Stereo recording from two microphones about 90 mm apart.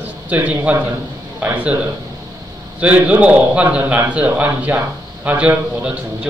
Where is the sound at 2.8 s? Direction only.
15° right (ahead or behind).